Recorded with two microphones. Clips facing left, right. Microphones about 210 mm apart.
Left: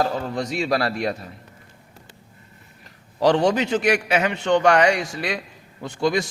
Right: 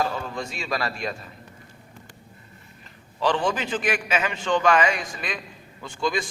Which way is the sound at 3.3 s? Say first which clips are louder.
Left 6 dB; 75° left (ahead or behind).